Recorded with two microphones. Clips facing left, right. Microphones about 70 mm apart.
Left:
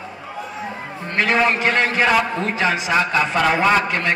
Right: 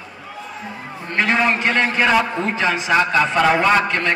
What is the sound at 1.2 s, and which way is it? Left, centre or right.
Speech, centre.